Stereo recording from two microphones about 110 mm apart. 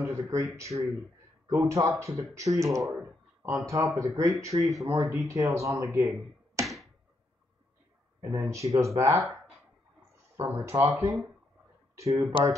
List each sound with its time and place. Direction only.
0.0 s speech: 25° right (ahead or behind)
4.8 s speech: 40° right (ahead or behind)
5.3 s speech: 30° right (ahead or behind)
6.6 s basketball bounce: centre (ahead or behind)
8.2 s speech: 25° right (ahead or behind)
10.3 s speech: 25° right (ahead or behind)